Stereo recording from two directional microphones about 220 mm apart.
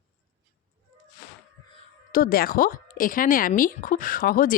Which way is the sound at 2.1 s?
40° left (ahead or behind).